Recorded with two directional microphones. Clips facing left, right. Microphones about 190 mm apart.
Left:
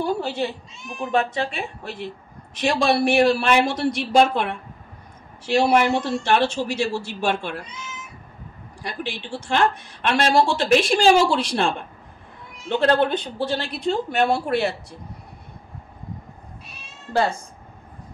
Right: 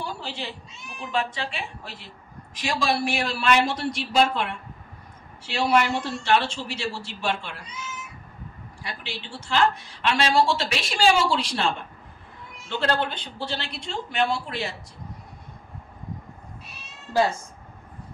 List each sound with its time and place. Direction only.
0.0 s a woman's voice: 50° left (ahead or behind)
8.8 s a woman's voice: 55° left (ahead or behind)